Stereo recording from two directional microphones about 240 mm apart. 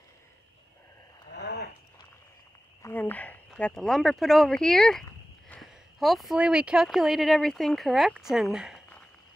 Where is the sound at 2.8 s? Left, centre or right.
Centre.